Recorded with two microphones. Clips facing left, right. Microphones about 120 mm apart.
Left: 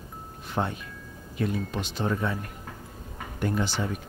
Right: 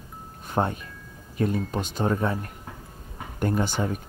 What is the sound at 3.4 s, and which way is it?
Speech, 45° right (ahead or behind).